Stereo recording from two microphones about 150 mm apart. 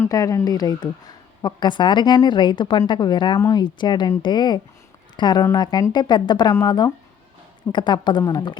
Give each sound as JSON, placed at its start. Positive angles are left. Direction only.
{"t": 0.0, "sound": "a woman's voice", "side_deg": 20}